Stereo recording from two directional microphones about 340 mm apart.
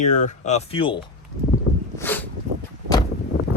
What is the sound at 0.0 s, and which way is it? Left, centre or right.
Speech, left.